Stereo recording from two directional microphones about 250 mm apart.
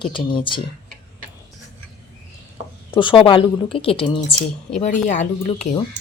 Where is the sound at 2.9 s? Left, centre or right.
Centre.